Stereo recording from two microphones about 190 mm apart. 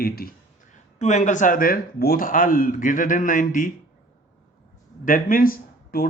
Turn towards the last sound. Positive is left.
turn(degrees=50)  # may be behind; listen again after turning